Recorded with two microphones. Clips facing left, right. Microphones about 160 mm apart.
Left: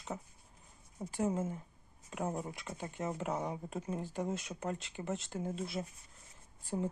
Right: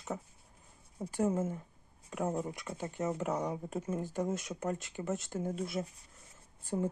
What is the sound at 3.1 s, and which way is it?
Speech, 50° right (ahead or behind).